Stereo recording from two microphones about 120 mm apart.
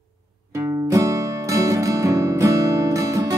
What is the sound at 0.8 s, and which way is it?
Music, 25° right (ahead or behind).